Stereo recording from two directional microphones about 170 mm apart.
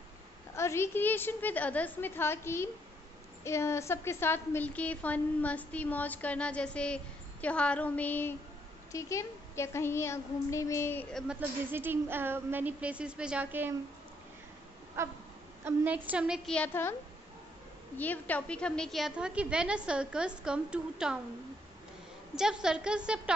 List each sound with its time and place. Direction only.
0.6 s a woman's voice: 15° left (ahead or behind)
11.1 s speech: 5° right (ahead or behind)
15.0 s speech: 15° right (ahead or behind)
16.5 s a woman's voice: 10° left (ahead or behind)
17.9 s a woman's voice: 10° left (ahead or behind); by 21.2 s 5° right (ahead or behind)
22.3 s a woman's voice: 5° right (ahead or behind)